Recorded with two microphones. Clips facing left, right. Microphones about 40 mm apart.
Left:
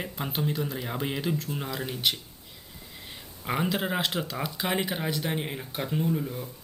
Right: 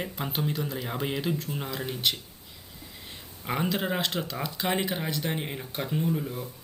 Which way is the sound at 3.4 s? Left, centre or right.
Centre.